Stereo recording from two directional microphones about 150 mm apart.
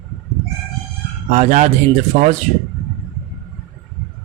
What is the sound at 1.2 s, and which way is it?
Speech, 55° right (ahead or behind).